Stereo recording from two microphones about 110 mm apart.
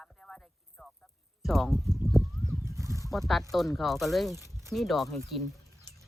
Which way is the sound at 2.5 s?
25° right (ahead or behind).